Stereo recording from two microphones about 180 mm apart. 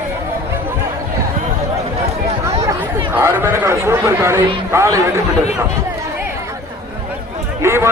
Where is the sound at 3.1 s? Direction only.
10° right (ahead or behind).